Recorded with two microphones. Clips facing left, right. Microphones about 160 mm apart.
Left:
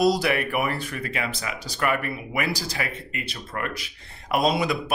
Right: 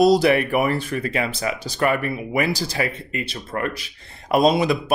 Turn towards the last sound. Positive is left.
turn(degrees=-30)  # may be behind; listen again after turning